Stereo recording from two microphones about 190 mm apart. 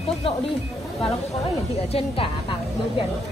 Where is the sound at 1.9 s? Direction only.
30° left (ahead or behind).